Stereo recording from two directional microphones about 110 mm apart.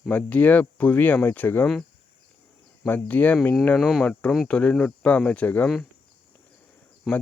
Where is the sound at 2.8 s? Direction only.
15° left (ahead or behind).